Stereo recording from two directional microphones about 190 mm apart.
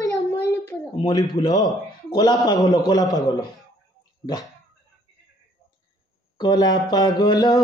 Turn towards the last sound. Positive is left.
turn(degrees=20)  # may be behind; listen again after turning